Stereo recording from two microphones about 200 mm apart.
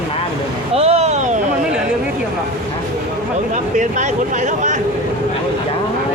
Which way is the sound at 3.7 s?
40° right (ahead or behind).